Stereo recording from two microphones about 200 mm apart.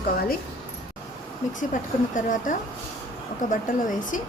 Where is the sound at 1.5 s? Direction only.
40° left (ahead or behind).